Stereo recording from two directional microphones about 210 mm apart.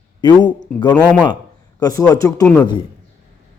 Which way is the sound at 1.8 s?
15° left (ahead or behind).